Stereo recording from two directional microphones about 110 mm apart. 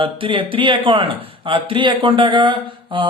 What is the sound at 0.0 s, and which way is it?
Speech, 50° right (ahead or behind).